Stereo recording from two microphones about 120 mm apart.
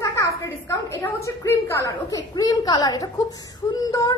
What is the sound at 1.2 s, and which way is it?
A woman's voice, 25° left (ahead or behind).